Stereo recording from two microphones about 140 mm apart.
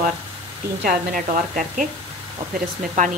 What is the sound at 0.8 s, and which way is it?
A woman's voice, 70° right (ahead or behind).